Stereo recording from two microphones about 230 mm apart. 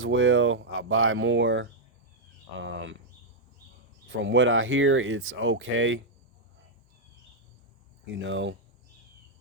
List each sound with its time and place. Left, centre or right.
0.0 s speech: right
4.1 s speech: right
8.0 s speech: right